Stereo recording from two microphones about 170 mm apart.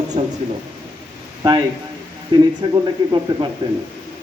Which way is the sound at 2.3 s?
25° right (ahead or behind).